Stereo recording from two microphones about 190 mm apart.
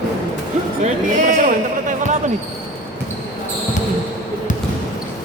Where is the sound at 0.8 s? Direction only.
40° right (ahead or behind).